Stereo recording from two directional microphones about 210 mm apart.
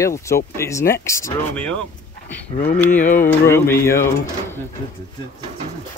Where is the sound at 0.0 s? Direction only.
15° left (ahead or behind).